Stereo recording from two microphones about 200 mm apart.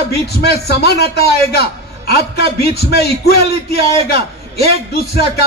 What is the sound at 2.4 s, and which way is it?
Speech, 30° right (ahead or behind).